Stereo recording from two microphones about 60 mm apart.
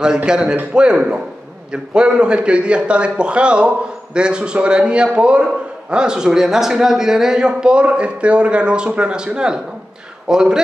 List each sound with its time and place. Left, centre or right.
0.0 s a man's voice: centre